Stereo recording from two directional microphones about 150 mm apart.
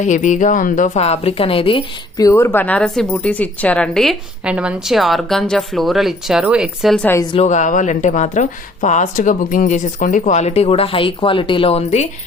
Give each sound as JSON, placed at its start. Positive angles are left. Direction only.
{"t": 0.0, "sound": "a woman's voice", "side_deg": 55}
{"t": 2.1, "sound": "speech", "side_deg": 20}
{"t": 6.9, "sound": "a woman's voice", "side_deg": 10}
{"t": 7.3, "sound": "a woman's voice", "side_deg": 50}